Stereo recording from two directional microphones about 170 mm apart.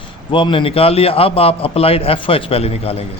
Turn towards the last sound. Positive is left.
turn(degrees=35)  # may be behind; listen again after turning